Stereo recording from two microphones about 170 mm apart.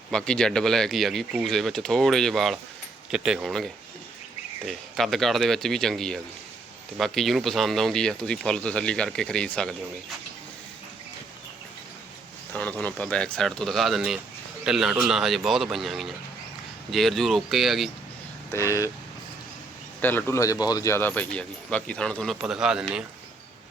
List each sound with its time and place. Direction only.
0.1 s speech: 5° left (ahead or behind)
12.5 s speech: 10° left (ahead or behind)
20.0 s speech: 10° left (ahead or behind); by 22.9 s 5° right (ahead or behind)